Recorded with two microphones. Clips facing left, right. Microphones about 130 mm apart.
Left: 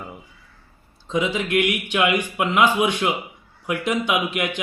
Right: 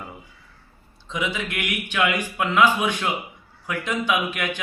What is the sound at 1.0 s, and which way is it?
A man's voice, 30° left (ahead or behind).